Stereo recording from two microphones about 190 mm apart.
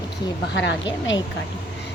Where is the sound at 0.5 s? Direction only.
70° left (ahead or behind).